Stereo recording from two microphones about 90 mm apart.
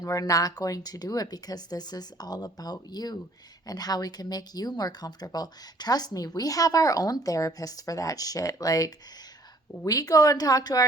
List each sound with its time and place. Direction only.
0.0 s speech: 40° left (ahead or behind)